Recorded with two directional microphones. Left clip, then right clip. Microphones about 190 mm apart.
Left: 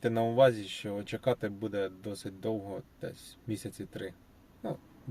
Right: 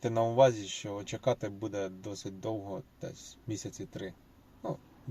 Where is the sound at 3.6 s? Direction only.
20° left (ahead or behind).